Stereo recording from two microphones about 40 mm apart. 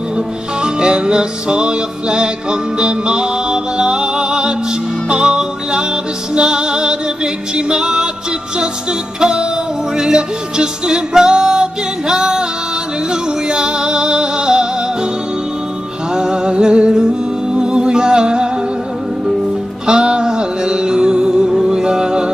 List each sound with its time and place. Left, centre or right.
0.6 s music: right
9.2 s music: centre
16.1 s music: centre
19.9 s music: right